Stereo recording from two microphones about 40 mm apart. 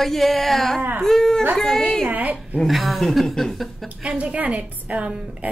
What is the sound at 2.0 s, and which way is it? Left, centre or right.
Speech, right.